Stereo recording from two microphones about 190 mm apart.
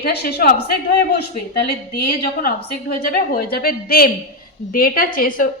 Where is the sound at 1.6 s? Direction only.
55° left (ahead or behind).